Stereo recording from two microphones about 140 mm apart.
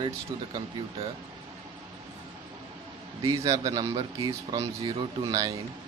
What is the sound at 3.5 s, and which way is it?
Speech, 25° right (ahead or behind).